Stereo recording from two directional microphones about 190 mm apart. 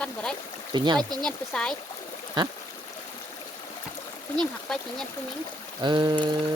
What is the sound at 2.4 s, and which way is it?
Speech, 25° right (ahead or behind).